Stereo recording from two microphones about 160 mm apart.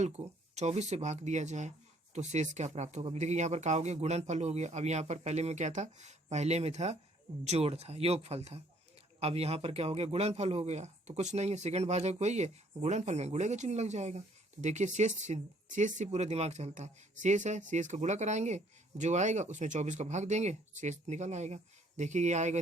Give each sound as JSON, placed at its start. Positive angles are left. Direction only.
{"t": 0.0, "sound": "speech", "side_deg": -45}